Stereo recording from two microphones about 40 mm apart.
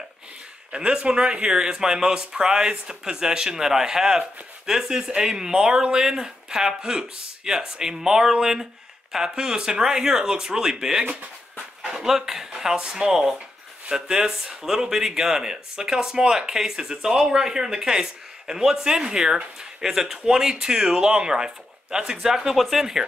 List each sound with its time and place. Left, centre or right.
0.7 s speech: right